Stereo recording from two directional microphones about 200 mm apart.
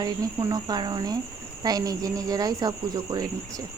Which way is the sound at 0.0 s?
20° right (ahead or behind).